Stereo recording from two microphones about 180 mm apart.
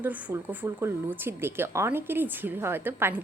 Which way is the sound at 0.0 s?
10° right (ahead or behind).